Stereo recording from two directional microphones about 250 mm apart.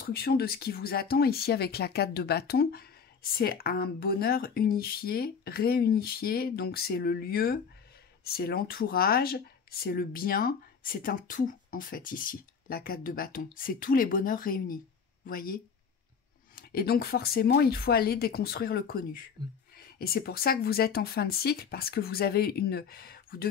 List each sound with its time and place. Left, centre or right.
0.0 s speech: left